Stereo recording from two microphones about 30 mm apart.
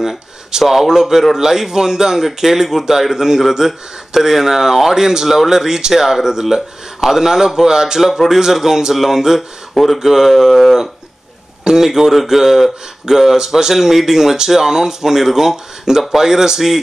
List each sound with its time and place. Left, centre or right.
0.0 s speech: centre